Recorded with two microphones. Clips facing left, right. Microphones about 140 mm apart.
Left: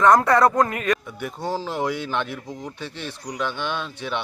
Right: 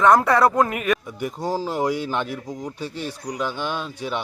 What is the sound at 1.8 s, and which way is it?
Speech, 40° right (ahead or behind).